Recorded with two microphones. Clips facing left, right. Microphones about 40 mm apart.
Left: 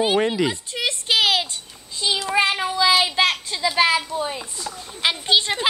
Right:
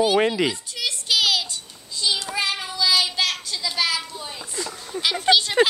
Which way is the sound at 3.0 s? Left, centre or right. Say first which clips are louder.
Left 4 dB; left.